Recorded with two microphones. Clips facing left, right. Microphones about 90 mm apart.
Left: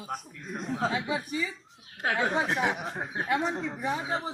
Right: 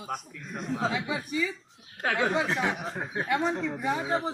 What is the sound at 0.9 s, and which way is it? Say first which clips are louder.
Speech: even; 25° left (ahead or behind).